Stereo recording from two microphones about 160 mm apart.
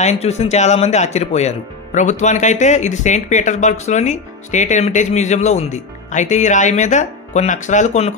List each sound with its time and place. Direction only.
0.0 s speech: 45° left (ahead or behind)